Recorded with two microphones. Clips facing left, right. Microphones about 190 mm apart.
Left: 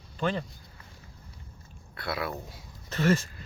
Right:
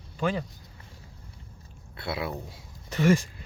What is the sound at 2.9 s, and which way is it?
Speech, 15° right (ahead or behind).